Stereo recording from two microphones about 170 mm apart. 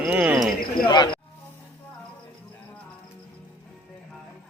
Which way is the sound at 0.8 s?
25° left (ahead or behind).